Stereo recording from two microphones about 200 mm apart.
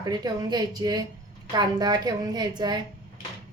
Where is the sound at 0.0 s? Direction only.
20° right (ahead or behind).